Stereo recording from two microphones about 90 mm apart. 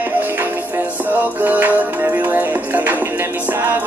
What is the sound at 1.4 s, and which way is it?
Music, 20° right (ahead or behind).